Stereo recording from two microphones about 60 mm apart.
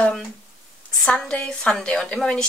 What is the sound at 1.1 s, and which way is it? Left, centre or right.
A woman's voice, centre.